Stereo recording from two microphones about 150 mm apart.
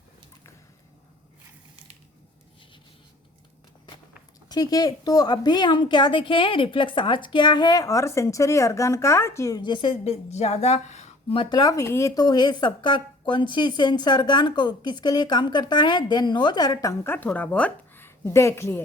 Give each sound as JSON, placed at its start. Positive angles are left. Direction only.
{"t": 4.4, "sound": "a woman's voice", "side_deg": 25}
{"t": 9.6, "sound": "a woman's voice", "side_deg": 30}